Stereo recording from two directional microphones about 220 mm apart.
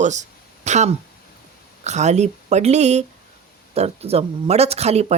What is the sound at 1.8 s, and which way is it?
Speech, 30° right (ahead or behind).